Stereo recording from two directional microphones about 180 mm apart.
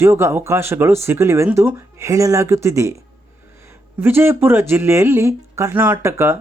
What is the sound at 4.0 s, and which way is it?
Speech, 10° right (ahead or behind).